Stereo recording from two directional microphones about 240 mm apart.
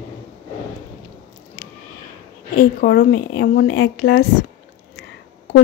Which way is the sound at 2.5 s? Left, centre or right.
Left.